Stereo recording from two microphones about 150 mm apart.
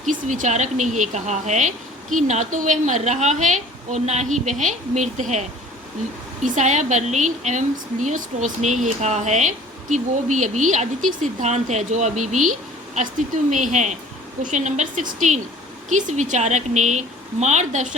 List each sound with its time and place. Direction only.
0.0 s speech: 60° right (ahead or behind)